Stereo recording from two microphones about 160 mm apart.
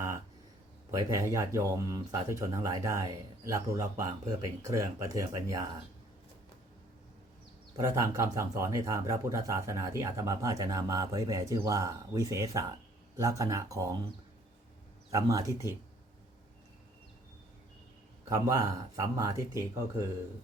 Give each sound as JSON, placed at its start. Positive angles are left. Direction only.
{"t": 0.9, "sound": "speech", "side_deg": -20}
{"t": 7.8, "sound": "speech", "side_deg": -20}
{"t": 15.1, "sound": "speech", "side_deg": -20}
{"t": 18.3, "sound": "speech", "side_deg": -20}